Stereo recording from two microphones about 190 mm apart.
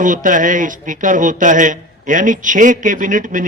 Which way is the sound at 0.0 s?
45° right (ahead or behind).